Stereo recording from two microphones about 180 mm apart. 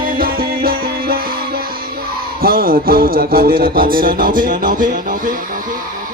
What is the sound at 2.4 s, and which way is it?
Music, 55° right (ahead or behind).